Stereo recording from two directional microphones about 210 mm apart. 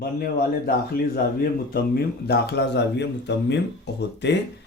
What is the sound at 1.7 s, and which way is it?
Speech, 50° left (ahead or behind).